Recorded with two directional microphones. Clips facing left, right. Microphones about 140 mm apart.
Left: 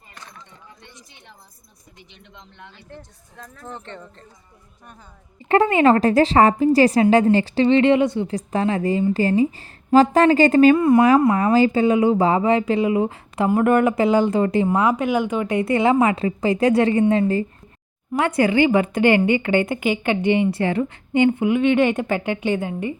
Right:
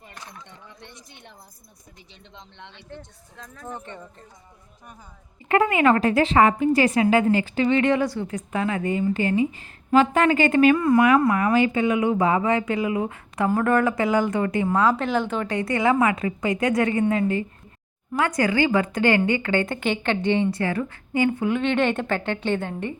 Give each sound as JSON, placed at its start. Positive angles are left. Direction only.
{"t": 3.3, "sound": "speech", "side_deg": 5}
{"t": 3.7, "sound": "speech", "side_deg": -15}
{"t": 5.5, "sound": "a woman's voice", "side_deg": 35}
{"t": 15.5, "sound": "a woman's voice", "side_deg": 25}